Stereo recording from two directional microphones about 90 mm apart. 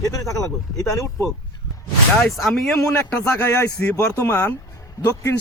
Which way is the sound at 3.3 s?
25° left (ahead or behind).